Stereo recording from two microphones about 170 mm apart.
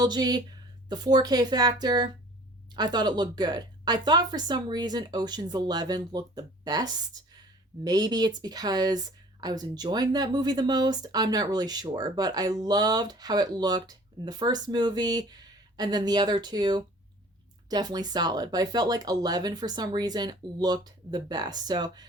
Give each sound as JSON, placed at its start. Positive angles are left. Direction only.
{"t": 0.0, "sound": "speech", "side_deg": -25}